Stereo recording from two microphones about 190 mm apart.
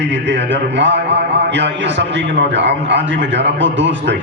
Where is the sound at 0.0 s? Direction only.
70° right (ahead or behind).